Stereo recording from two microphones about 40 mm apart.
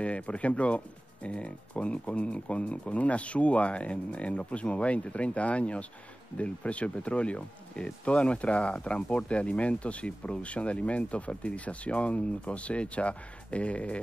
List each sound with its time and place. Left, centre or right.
0.0 s speech: left